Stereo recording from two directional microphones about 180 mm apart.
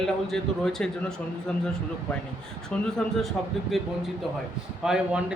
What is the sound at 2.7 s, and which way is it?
Speech, 5° left (ahead or behind).